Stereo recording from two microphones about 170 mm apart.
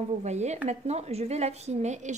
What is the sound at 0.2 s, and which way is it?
A woman's voice, 40° right (ahead or behind).